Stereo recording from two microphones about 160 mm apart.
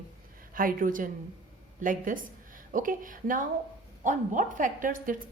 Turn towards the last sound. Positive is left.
turn(degrees=-60)  # may be behind; listen again after turning